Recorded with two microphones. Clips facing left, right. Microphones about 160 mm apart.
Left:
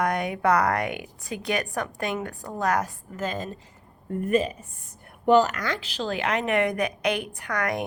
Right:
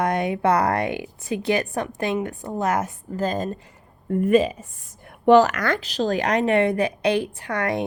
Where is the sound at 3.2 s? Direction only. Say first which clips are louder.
Right 5 dB; 40° right (ahead or behind).